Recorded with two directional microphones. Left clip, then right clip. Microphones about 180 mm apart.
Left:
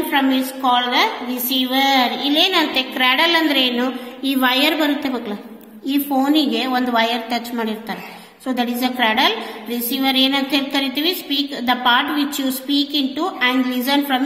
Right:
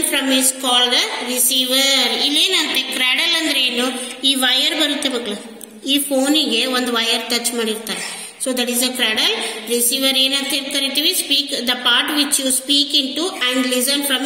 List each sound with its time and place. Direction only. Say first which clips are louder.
0.7 s a woman's voice: left 1 dB; 50° left (ahead or behind)